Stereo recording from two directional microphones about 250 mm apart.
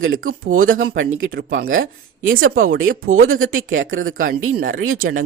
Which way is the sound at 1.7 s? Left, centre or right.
Right.